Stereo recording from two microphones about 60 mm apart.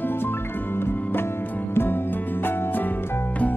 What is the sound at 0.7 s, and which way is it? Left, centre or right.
Music, left.